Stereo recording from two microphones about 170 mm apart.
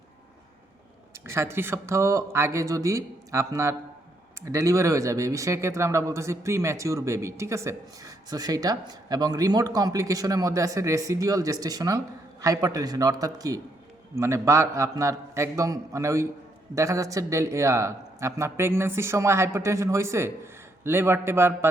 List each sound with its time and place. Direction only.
1.2 s speech: 15° right (ahead or behind)